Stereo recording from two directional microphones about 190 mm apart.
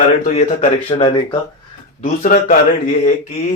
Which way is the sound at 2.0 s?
45° left (ahead or behind).